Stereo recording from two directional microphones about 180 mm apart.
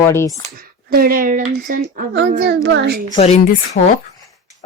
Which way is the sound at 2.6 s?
70° right (ahead or behind).